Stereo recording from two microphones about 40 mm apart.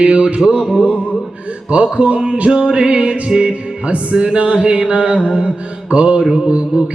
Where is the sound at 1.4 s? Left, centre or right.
Right.